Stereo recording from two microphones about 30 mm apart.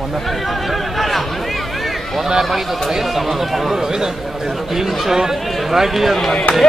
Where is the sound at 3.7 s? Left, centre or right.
Centre.